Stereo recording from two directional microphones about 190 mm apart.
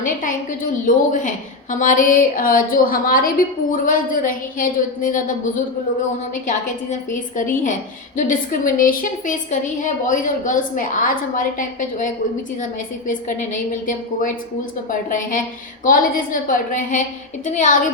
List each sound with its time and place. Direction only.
0.0 s a woman's voice: 45° left (ahead or behind)